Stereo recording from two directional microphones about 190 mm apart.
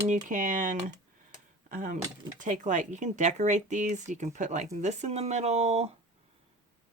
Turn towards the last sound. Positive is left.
turn(degrees=-35)  # may be behind; listen again after turning